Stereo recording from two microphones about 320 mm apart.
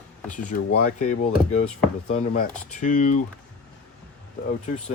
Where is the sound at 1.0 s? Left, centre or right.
Left.